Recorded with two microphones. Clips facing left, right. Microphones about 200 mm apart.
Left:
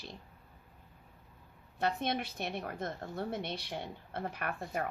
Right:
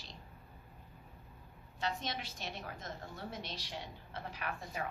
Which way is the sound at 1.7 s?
60° left (ahead or behind).